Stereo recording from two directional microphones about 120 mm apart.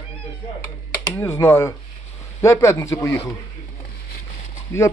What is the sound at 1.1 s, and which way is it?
A man's voice, 20° left (ahead or behind).